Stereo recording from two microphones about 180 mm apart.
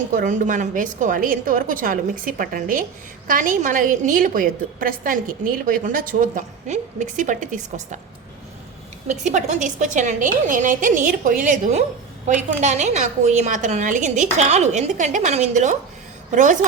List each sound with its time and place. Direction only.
0.1 s a woman's voice: 45° right (ahead or behind)
9.0 s a woman's voice: 40° right (ahead or behind)